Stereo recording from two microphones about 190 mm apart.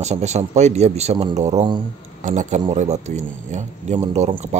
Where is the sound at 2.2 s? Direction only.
40° right (ahead or behind).